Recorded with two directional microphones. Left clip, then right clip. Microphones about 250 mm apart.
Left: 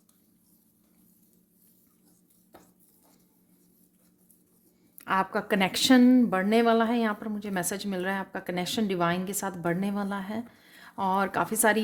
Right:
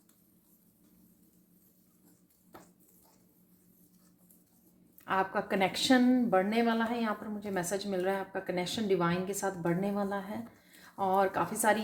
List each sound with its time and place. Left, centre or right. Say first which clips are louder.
4.9 s speech: left 4 dB; left